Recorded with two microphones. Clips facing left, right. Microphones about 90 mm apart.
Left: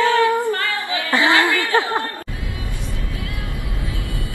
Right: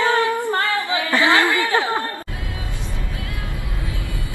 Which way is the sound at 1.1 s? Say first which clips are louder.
Left 1 dB; 20° left (ahead or behind).